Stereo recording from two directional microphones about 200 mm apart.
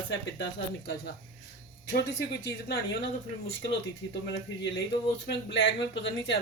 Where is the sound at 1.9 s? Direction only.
55° left (ahead or behind).